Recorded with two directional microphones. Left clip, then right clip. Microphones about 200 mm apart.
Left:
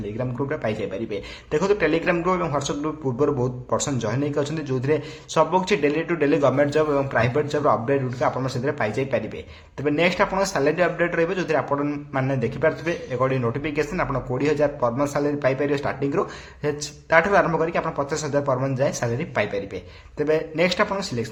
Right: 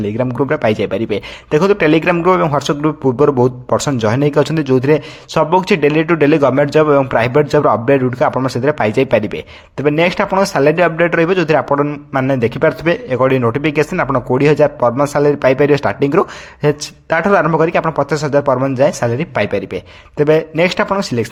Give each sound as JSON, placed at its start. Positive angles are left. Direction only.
{"t": 0.2, "sound": "a man's voice", "side_deg": -40}